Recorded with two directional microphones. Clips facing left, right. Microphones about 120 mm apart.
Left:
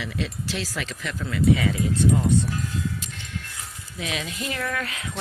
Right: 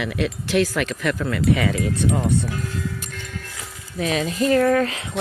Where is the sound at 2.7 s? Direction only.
50° right (ahead or behind).